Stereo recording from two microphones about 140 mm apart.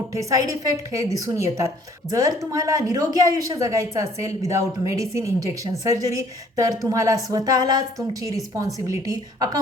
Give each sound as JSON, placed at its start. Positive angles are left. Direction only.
{"t": 0.1, "sound": "a woman's voice", "side_deg": -25}